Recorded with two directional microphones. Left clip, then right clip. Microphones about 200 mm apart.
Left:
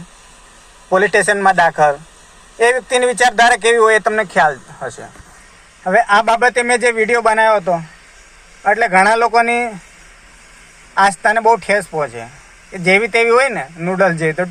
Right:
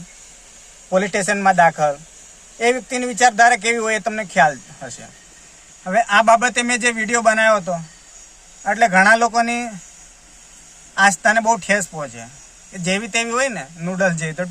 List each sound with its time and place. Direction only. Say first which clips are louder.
0.9 s speech: left 6 dB; centre (ahead or behind)
5.9 s speech: left 2 dB; centre (ahead or behind)
10.9 s speech: left 2 dB; centre (ahead or behind)